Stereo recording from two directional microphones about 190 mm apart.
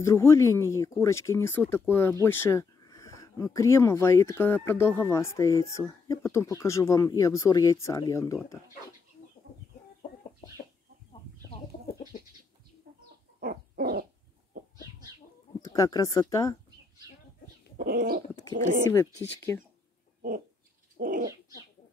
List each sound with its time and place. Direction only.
0.0 s speech: 15° left (ahead or behind)
11.9 s bird: 50° left (ahead or behind)
13.4 s owl: 50° right (ahead or behind)
15.6 s speech: 20° left (ahead or behind)
17.7 s dog: 50° right (ahead or behind)
18.9 s speech: 15° left (ahead or behind)
20.2 s a sound: 50° right (ahead or behind)
21.0 s bird: 50° right (ahead or behind)